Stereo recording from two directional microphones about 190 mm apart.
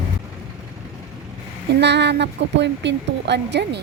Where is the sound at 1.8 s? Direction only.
65° right (ahead or behind).